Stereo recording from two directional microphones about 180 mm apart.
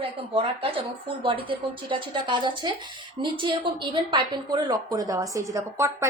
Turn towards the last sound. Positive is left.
turn(degrees=-15)  # may be behind; listen again after turning